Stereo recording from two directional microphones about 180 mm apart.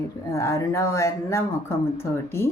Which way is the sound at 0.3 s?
15° left (ahead or behind).